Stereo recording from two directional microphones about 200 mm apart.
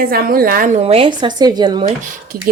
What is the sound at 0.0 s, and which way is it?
A woman's voice, 45° right (ahead or behind).